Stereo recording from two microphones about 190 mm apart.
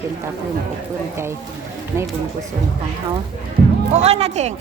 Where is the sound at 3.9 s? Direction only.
35° right (ahead or behind).